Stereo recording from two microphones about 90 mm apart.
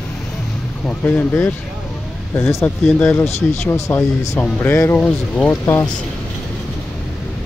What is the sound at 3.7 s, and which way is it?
Speech, 30° left (ahead or behind).